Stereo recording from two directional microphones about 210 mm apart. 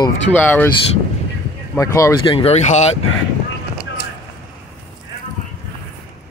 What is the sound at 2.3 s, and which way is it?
Speech, 30° left (ahead or behind).